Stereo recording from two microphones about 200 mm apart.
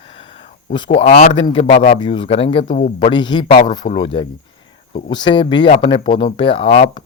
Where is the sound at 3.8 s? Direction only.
35° left (ahead or behind).